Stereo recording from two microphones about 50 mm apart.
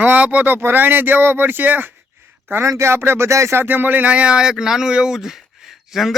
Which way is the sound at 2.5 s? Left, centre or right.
Right.